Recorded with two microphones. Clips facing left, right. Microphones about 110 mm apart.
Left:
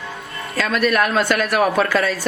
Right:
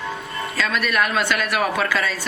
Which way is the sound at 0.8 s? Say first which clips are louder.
Left 5 dB; 35° left (ahead or behind).